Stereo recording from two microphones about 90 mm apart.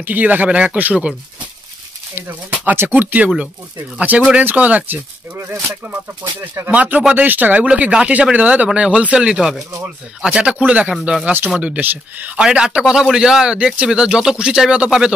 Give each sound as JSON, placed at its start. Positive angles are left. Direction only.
{"t": 0.0, "sound": "a man's voice", "side_deg": -20}
{"t": 2.1, "sound": "a man's voice", "side_deg": -25}
{"t": 6.4, "sound": "speech", "side_deg": -30}
{"t": 6.7, "sound": "a man's voice", "side_deg": -15}
{"t": 10.9, "sound": "speech", "side_deg": 0}
{"t": 11.2, "sound": "a man's voice", "side_deg": -25}